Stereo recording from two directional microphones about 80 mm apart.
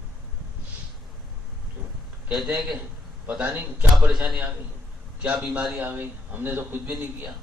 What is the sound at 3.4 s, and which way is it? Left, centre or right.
Speech, right.